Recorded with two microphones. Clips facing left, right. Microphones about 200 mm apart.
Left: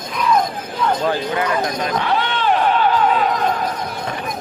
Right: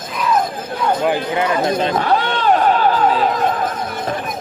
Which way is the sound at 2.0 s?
45° right (ahead or behind).